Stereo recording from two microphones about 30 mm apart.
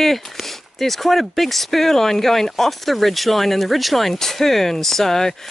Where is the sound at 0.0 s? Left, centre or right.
Centre.